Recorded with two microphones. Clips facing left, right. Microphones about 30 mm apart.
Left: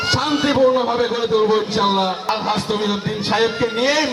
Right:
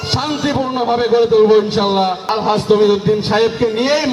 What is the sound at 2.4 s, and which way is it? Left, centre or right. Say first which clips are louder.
Speech: right 8 dB; centre.